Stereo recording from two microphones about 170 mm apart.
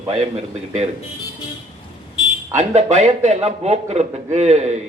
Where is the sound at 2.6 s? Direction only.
40° right (ahead or behind).